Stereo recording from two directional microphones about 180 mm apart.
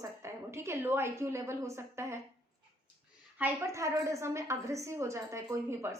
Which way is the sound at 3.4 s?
15° right (ahead or behind).